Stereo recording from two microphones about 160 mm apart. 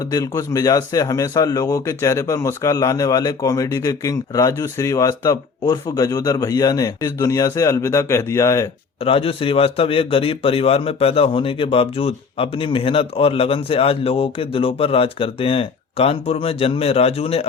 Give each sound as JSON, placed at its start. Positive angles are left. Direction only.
{"t": 0.1, "sound": "a man's voice", "side_deg": 20}
{"t": 9.0, "sound": "a man's voice", "side_deg": 35}